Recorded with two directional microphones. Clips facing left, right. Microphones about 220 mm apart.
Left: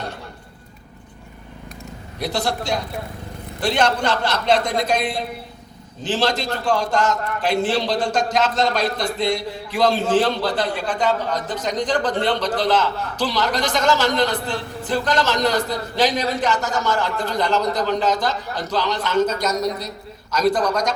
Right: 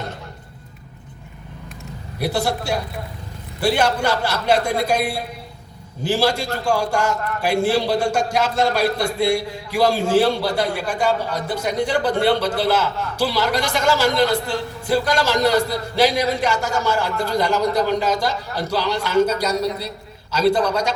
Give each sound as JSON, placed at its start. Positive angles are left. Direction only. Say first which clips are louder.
{"t": 2.1, "sound": "a man's voice", "louder": "right 2 dB", "side_deg": -10}
{"t": 19.5, "sound": "a woman's voice", "louder": "right 1 dB", "side_deg": -30}
{"t": 20.5, "sound": "a man's voice", "louder": "right 2 dB", "side_deg": -10}